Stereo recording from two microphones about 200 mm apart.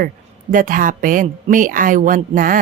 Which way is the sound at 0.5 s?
45° right (ahead or behind).